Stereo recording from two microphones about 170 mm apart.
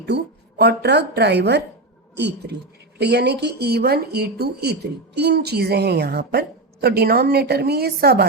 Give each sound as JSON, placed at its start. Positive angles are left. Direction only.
{"t": 0.1, "sound": "speech", "side_deg": -80}